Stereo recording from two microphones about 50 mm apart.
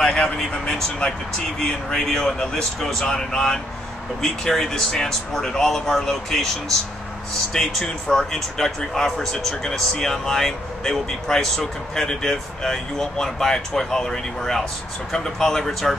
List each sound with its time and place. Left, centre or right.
0.0 s speech: centre
7.5 s speech: centre